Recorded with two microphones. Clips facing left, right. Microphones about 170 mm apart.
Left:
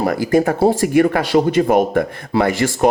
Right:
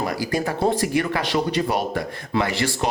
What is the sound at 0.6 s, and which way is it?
Speech, 45° left (ahead or behind).